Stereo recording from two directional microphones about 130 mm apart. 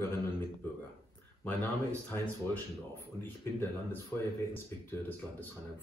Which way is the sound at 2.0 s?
10° left (ahead or behind).